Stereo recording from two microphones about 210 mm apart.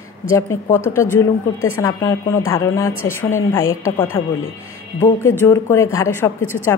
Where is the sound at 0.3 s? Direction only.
15° left (ahead or behind).